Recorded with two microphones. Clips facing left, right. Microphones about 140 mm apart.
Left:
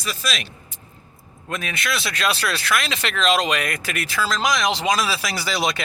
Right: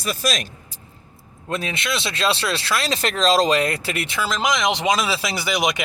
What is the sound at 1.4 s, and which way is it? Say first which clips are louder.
Speech: right 2 dB; 30° right (ahead or behind).